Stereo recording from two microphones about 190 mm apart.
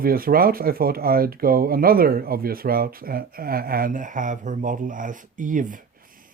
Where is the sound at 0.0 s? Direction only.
50° right (ahead or behind).